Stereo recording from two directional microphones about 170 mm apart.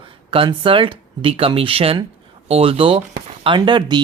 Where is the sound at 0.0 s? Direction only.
30° right (ahead or behind).